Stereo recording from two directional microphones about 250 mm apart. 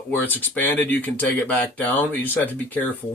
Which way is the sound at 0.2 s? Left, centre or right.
Centre.